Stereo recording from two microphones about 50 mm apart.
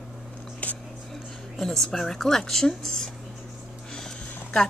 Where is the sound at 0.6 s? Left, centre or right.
Left.